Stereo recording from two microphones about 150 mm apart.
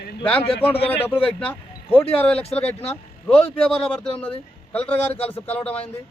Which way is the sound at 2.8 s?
10° left (ahead or behind).